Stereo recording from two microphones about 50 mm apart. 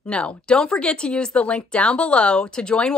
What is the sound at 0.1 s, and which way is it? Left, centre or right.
Speech, left.